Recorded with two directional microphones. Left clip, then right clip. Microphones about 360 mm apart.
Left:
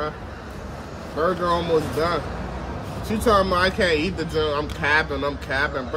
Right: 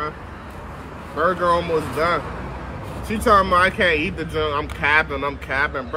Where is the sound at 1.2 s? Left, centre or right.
Centre.